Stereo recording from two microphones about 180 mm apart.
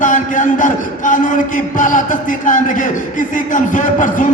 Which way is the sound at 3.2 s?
45° left (ahead or behind).